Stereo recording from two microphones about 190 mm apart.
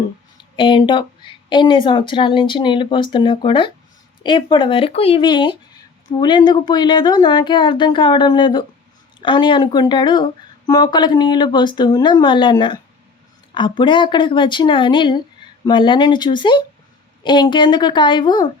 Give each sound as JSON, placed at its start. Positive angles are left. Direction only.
{"t": 0.5, "sound": "speech", "side_deg": 25}